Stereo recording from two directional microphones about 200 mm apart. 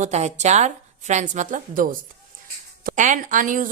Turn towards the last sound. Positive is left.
turn(degrees=-40)  # may be behind; listen again after turning